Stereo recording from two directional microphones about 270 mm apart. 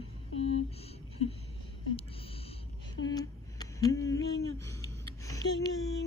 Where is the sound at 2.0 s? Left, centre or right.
Left.